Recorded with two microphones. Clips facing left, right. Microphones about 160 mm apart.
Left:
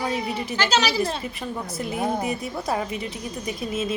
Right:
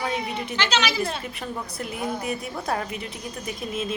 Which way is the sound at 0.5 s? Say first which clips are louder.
Left 2 dB; 40° left (ahead or behind).